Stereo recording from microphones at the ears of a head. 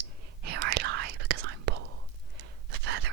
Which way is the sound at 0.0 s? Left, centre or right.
Right.